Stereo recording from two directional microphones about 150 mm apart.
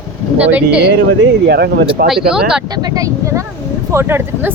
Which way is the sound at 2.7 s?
25° right (ahead or behind).